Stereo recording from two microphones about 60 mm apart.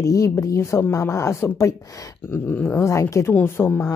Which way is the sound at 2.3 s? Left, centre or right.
Left.